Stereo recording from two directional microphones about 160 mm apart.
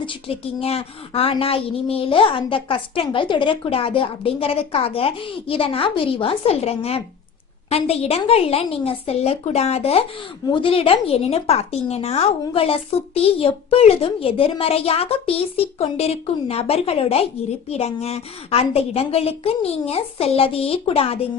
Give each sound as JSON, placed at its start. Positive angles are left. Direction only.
{"t": 0.0, "sound": "a woman's voice", "side_deg": 35}